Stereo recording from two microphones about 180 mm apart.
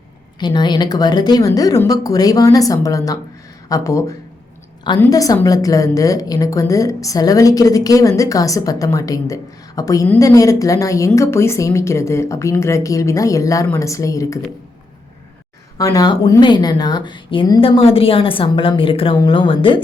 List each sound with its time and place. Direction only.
0.3 s a woman's voice: 25° left (ahead or behind)
15.8 s speech: 20° left (ahead or behind)